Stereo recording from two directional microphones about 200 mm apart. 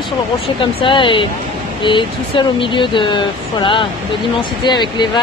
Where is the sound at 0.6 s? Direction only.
25° left (ahead or behind).